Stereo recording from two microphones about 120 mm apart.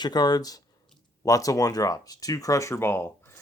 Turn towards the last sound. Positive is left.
turn(degrees=20)  # may be behind; listen again after turning